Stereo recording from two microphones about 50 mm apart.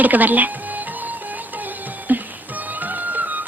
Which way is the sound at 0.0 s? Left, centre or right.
Right.